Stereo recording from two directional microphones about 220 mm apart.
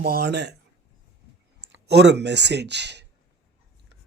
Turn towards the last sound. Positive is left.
turn(degrees=-50)  # may be behind; listen again after turning